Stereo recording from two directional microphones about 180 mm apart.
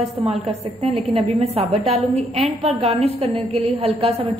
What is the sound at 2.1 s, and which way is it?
Speech, 10° left (ahead or behind).